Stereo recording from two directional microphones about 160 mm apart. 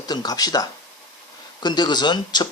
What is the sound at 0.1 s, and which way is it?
A man's voice, 25° left (ahead or behind).